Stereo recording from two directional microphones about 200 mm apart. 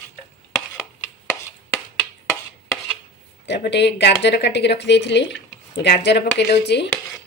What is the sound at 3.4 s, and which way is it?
Speech, 60° left (ahead or behind).